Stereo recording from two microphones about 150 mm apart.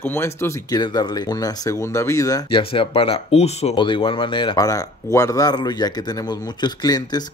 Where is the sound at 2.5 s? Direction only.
35° left (ahead or behind).